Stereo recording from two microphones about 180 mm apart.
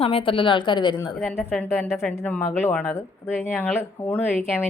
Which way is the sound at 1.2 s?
5° left (ahead or behind).